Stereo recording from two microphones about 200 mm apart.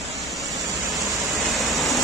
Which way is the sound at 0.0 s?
Centre (ahead or behind).